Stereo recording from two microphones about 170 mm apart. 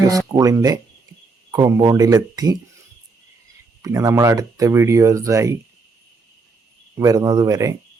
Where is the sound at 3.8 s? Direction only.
20° right (ahead or behind).